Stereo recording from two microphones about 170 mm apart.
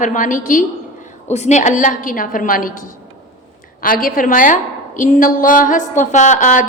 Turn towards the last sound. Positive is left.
turn(degrees=50)  # may be behind; listen again after turning